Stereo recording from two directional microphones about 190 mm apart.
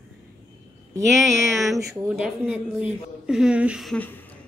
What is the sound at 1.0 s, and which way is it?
Speech, centre (ahead or behind).